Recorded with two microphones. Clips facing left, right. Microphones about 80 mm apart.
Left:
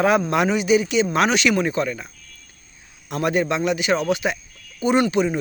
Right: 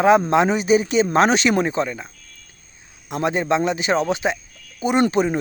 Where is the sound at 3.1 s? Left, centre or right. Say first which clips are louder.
Right 1 dB; right.